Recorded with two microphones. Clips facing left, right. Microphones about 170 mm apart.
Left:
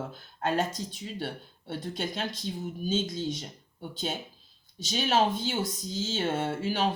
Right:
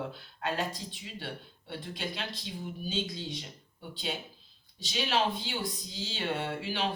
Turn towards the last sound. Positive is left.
turn(degrees=45)  # may be behind; listen again after turning